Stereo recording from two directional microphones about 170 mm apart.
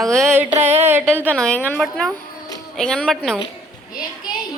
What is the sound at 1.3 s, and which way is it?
A woman's voice, 5° left (ahead or behind).